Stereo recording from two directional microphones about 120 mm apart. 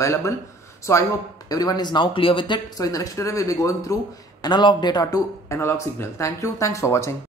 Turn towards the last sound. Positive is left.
turn(degrees=25)  # may be behind; listen again after turning